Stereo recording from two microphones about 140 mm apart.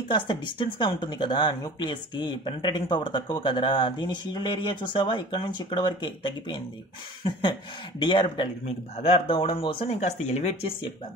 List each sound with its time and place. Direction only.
0.1 s speech: 35° left (ahead or behind)
8.0 s speech: 35° left (ahead or behind); by 10.7 s 55° left (ahead or behind)